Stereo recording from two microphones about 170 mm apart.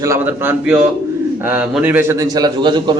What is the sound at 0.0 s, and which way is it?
A man's voice, 15° right (ahead or behind).